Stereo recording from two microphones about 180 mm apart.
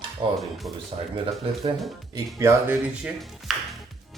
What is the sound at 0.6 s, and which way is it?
Speech, 20° right (ahead or behind).